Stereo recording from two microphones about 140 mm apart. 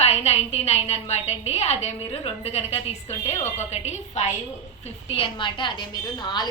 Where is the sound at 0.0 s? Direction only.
50° left (ahead or behind).